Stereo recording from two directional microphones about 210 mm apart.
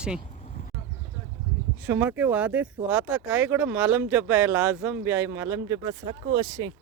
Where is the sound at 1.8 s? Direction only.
10° right (ahead or behind).